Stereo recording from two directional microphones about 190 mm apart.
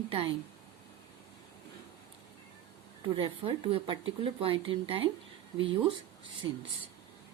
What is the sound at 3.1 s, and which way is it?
Speech, 25° right (ahead or behind).